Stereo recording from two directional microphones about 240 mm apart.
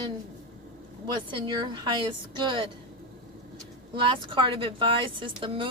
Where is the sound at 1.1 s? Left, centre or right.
Centre.